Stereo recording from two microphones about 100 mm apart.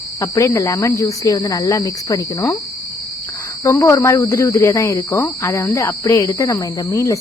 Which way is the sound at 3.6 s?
30° left (ahead or behind).